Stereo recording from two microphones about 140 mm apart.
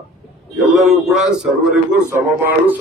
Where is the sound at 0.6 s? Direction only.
Centre (ahead or behind).